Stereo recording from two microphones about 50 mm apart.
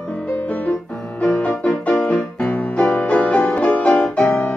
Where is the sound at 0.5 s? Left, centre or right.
Left.